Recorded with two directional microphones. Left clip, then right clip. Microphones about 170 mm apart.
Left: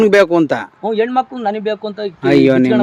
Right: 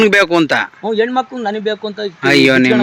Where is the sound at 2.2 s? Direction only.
15° left (ahead or behind).